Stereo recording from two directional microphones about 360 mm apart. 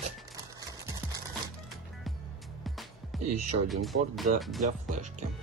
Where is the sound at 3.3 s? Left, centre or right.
Right.